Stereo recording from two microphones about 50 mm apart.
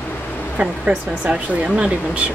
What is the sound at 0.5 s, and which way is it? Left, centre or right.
Speech, right.